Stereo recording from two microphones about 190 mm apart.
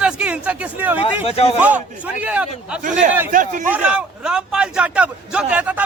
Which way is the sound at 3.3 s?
45° right (ahead or behind).